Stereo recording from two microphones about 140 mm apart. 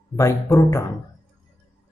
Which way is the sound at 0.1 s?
20° left (ahead or behind).